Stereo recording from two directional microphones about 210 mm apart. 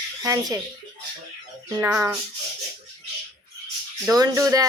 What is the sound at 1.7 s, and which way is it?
Speech, 10° right (ahead or behind).